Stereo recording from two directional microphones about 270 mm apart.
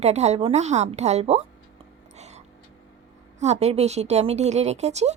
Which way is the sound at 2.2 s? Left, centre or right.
Right.